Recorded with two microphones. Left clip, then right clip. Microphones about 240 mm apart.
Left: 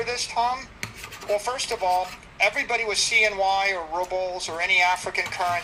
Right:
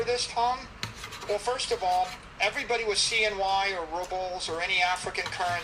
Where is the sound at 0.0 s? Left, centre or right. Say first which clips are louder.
Left 2 dB; left.